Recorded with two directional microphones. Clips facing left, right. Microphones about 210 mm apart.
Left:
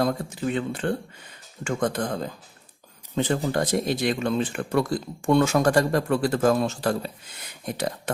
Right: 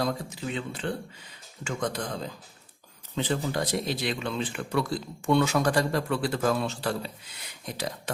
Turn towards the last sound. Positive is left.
turn(degrees=55)  # may be behind; listen again after turning